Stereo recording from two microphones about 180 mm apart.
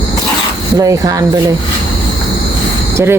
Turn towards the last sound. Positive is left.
turn(degrees=-15)  # may be behind; listen again after turning